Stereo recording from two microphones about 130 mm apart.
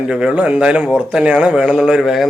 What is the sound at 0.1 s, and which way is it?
A man's voice, 10° right (ahead or behind).